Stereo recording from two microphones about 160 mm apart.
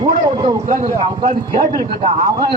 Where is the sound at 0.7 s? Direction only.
60° right (ahead or behind).